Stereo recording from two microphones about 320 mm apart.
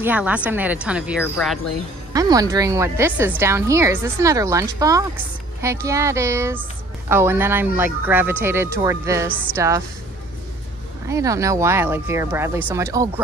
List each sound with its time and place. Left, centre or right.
0.0 s speech: centre
2.1 s speech: centre
11.1 s speech: centre